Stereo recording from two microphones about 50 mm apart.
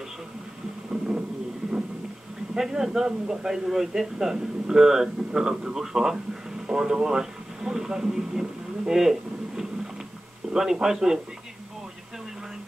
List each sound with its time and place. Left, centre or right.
2.5 s a man's voice: centre
10.5 s a man's voice: centre